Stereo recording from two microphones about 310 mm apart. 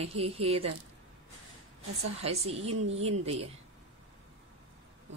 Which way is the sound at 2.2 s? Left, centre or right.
Centre.